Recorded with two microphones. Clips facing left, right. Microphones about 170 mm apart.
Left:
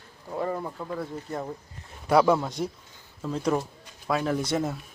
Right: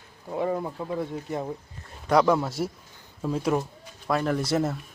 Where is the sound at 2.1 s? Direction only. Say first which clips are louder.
Even; 5° left (ahead or behind).